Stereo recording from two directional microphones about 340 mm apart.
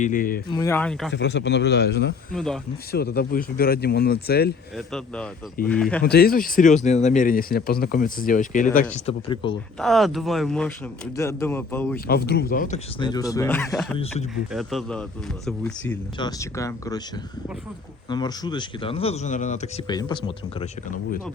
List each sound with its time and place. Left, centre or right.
0.0 s speech: left
0.5 s speech: centre
1.1 s speech: left
2.3 s speech: centre
2.9 s speech: left
4.9 s speech: centre
6.0 s speech: left
9.7 s speech: centre
12.0 s speech: left; by 17.0 s centre
18.1 s speech: centre